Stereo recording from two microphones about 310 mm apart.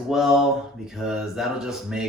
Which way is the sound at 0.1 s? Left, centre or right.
Centre.